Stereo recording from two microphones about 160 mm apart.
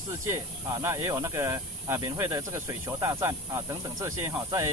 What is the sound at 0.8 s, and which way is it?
Speech, 20° right (ahead or behind).